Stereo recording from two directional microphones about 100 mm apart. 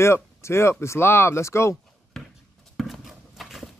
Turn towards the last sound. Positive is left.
turn(degrees=0)  # may be behind; listen again after turning